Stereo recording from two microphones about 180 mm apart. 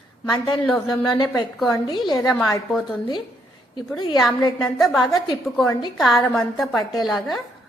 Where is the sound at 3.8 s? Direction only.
25° left (ahead or behind).